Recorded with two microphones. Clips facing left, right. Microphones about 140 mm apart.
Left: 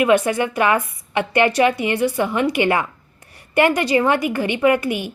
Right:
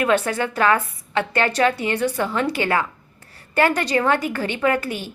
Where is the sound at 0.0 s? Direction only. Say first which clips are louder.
Left 4 dB; 15° left (ahead or behind).